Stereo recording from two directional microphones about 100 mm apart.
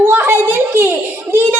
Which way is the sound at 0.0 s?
20° right (ahead or behind).